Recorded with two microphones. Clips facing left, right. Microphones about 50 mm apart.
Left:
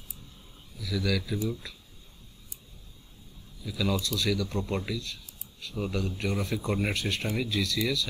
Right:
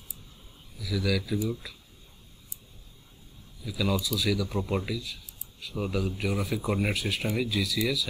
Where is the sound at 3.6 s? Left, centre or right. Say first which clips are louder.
Right 1 dB; centre.